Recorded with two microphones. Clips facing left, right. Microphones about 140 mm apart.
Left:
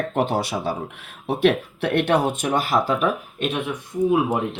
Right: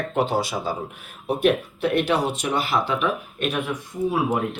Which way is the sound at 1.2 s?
90° left.